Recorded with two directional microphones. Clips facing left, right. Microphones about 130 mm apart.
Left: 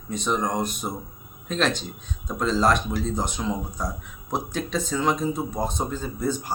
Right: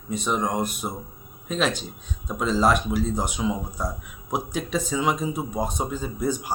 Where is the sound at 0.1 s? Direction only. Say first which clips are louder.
Even; 5° right (ahead or behind).